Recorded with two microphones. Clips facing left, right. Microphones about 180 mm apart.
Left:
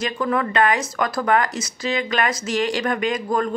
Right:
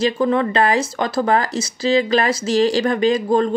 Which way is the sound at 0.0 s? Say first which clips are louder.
Right 5 dB; 30° right (ahead or behind).